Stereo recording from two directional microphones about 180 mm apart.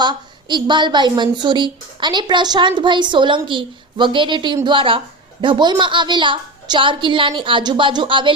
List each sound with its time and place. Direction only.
0.0 s a woman's voice: 25° right (ahead or behind)